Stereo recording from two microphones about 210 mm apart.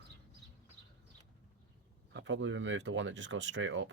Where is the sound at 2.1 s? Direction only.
65° right (ahead or behind).